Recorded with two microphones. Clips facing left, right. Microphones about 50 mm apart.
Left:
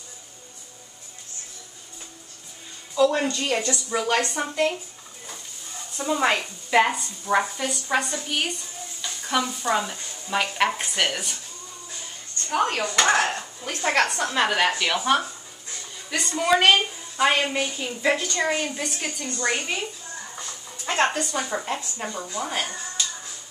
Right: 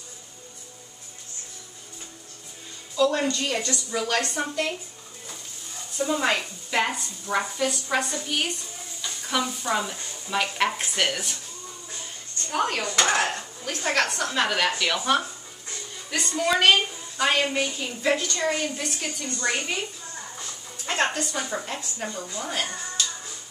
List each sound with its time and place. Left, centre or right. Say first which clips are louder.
3.0 s a woman's voice: left 2 dB; centre
5.9 s a woman's voice: left 2 dB; centre
9.0 s stir: left 2 dB; centre
12.5 s dishes: left 2 dB; centre
13.7 s a woman's voice: left 2 dB; centre
20.8 s a woman's voice: left 2 dB; centre